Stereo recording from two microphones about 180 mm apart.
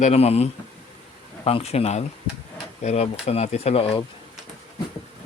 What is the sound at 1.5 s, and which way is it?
Speech, 35° left (ahead or behind).